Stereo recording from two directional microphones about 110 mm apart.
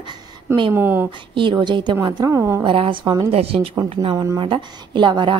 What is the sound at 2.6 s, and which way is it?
A woman's voice, 50° right (ahead or behind).